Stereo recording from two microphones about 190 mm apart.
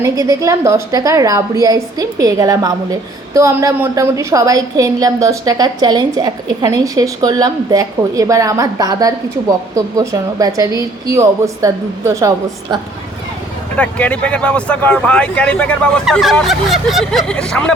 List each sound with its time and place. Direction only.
0.0 s a woman's voice: 15° right (ahead or behind)
13.7 s speech: 5° left (ahead or behind)